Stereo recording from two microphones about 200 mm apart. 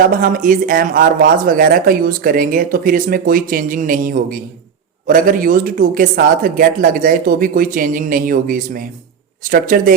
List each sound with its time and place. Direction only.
0.2 s speech: 45° right (ahead or behind)